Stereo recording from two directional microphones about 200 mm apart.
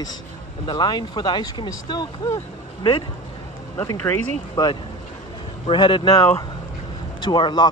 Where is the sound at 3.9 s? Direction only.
10° left (ahead or behind).